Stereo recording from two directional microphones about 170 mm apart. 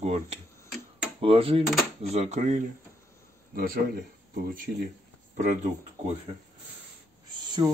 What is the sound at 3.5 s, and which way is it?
Speech, 55° right (ahead or behind).